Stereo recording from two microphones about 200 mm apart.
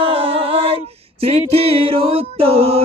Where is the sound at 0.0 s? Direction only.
30° right (ahead or behind).